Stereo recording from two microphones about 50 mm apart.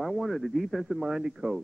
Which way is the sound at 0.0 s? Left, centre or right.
Centre.